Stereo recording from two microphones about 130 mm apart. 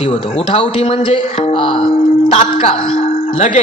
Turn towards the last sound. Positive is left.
turn(degrees=70)  # may be behind; listen again after turning